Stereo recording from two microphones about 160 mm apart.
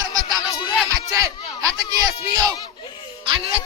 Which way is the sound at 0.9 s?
20° right (ahead or behind).